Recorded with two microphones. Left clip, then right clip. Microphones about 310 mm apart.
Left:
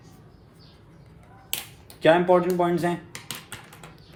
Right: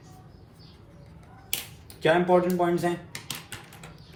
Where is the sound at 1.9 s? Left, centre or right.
Left.